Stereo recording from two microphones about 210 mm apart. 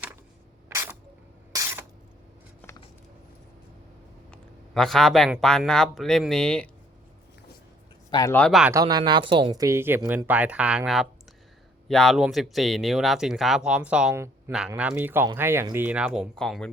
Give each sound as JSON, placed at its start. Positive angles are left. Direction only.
{"t": 0.7, "sound": "a sound", "side_deg": -10}
{"t": 4.3, "sound": "speech", "side_deg": 0}
{"t": 8.1, "sound": "speech", "side_deg": 15}
{"t": 8.7, "sound": "speech", "side_deg": -20}